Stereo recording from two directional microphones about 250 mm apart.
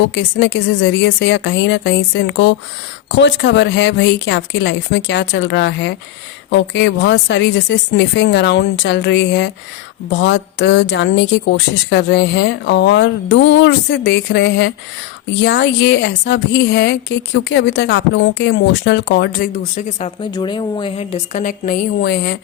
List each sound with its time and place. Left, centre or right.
0.0 s a woman's voice: left